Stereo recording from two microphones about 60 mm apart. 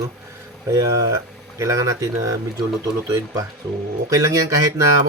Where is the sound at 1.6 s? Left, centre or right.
Right.